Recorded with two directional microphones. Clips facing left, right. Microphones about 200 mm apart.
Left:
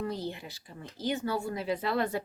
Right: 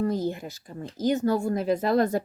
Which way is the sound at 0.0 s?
45° right (ahead or behind).